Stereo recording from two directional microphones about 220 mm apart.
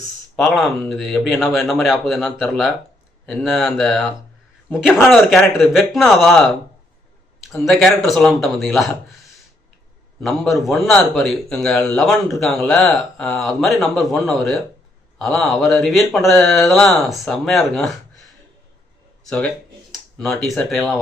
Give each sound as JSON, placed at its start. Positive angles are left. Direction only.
{"t": 0.3, "sound": "a man's voice", "side_deg": 0}
{"t": 10.2, "sound": "a man's voice", "side_deg": 0}
{"t": 19.9, "sound": "speech", "side_deg": 0}